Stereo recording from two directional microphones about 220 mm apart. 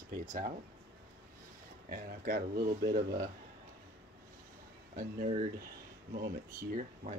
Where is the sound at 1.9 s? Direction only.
45° right (ahead or behind).